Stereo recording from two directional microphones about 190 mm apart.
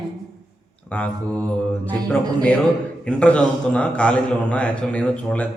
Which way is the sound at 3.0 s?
5° left (ahead or behind).